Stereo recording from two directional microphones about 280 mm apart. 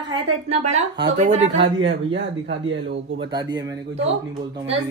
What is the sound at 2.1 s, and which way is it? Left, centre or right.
Speech, right.